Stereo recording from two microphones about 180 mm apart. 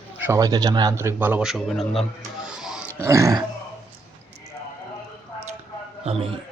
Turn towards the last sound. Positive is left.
turn(degrees=-30)  # may be behind; listen again after turning